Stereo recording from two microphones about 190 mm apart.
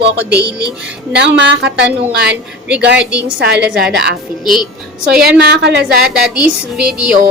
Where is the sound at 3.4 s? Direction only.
65° right (ahead or behind).